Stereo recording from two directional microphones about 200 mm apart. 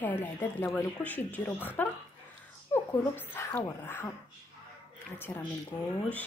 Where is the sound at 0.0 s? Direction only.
10° left (ahead or behind).